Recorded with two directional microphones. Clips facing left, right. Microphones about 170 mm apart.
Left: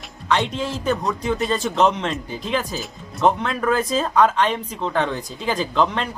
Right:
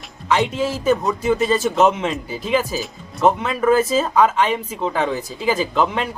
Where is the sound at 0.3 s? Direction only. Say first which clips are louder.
Right 3 dB; 5° right (ahead or behind).